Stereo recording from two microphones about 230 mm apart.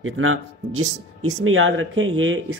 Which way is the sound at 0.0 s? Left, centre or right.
Right.